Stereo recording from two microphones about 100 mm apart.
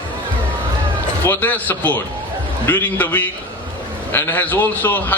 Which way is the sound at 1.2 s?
20° left (ahead or behind).